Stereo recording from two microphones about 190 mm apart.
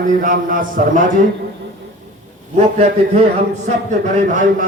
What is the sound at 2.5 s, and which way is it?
A man's voice, 35° right (ahead or behind).